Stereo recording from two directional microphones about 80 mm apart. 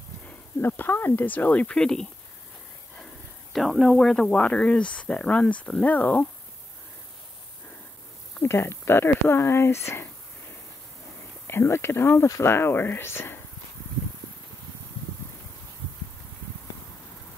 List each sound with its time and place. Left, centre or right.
0.3 s speech: left
3.5 s speech: centre
8.4 s speech: left
11.4 s speech: left